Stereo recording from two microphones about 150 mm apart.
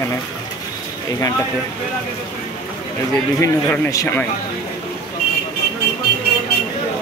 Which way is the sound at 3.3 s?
15° left (ahead or behind).